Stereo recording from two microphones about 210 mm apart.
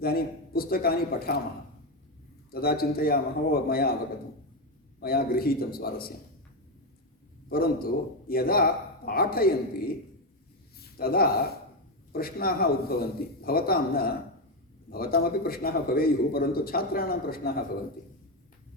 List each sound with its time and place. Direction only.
0.0 s a man's voice: 45° left (ahead or behind)
2.5 s a man's voice: 45° left (ahead or behind)
4.9 s a man's voice: 45° left (ahead or behind)
7.5 s a man's voice: 45° left (ahead or behind)
10.9 s a man's voice: 45° left (ahead or behind)